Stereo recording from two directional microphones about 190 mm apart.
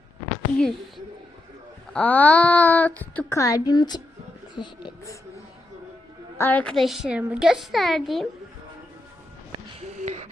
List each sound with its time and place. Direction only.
0.6 s a woman's voice: centre (ahead or behind); by 5.1 s 25° left (ahead or behind)
6.3 s a woman's voice: 10° left (ahead or behind)